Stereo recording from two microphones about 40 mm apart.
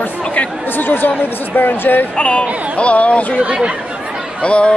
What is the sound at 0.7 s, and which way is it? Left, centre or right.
Speech, left.